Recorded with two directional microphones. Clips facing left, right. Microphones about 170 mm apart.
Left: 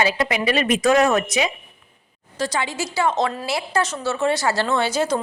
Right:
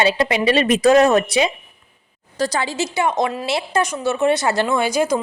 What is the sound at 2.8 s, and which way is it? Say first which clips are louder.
Speech: right 1 dB; 20° right (ahead or behind).